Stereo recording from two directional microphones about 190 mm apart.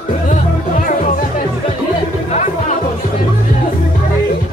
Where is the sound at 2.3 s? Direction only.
35° left (ahead or behind).